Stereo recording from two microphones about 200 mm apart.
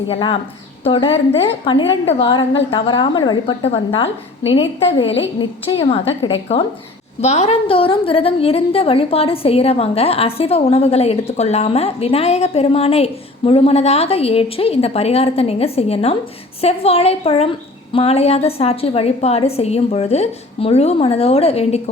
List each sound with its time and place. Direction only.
0.1 s a woman's voice: 25° left (ahead or behind)